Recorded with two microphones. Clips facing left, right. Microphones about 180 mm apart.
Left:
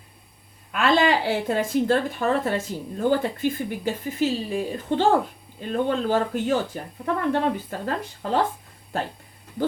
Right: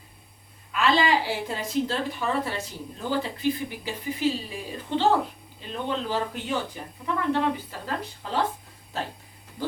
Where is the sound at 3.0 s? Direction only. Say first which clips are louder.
Left 4 dB; 50° left (ahead or behind).